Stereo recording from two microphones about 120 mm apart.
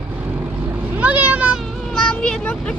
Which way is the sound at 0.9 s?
10° right (ahead or behind).